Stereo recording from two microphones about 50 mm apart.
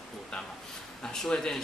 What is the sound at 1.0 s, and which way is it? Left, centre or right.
Speech, centre.